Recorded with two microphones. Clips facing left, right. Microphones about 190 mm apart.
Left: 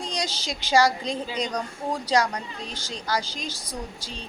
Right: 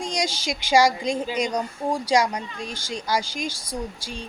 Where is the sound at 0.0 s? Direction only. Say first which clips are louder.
Right 4 dB; 10° right (ahead or behind).